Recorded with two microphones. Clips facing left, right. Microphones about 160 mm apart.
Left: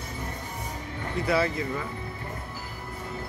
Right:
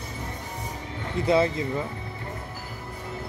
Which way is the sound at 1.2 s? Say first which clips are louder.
Right 4 dB; 25° right (ahead or behind).